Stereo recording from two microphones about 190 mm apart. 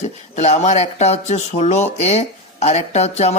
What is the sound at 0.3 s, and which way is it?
Speech, 35° left (ahead or behind).